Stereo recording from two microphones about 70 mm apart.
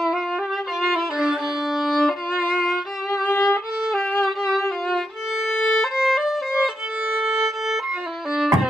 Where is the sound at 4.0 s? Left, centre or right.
Centre.